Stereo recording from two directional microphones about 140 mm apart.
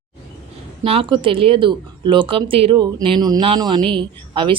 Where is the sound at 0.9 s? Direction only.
40° right (ahead or behind).